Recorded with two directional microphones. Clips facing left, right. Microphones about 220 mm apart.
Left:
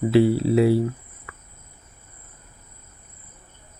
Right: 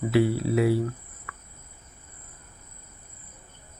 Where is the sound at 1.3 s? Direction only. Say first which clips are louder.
Left 1 dB; 25° left (ahead or behind).